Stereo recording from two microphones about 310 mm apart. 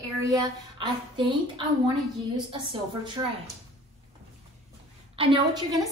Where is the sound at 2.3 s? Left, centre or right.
Centre.